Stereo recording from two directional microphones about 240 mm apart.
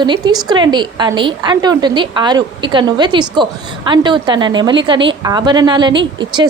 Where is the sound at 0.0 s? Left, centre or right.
Centre.